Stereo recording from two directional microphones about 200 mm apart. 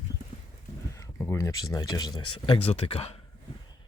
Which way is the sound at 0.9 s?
15° left (ahead or behind).